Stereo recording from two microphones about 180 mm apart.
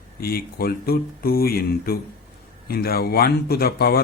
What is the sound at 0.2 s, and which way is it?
A man's voice, 55° left (ahead or behind).